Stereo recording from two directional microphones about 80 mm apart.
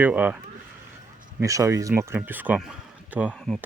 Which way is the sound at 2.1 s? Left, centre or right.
Right.